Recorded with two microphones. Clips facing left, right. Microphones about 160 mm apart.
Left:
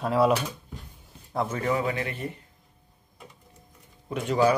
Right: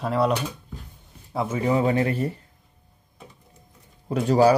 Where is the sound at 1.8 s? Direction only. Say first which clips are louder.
Right 7 dB; 35° right (ahead or behind).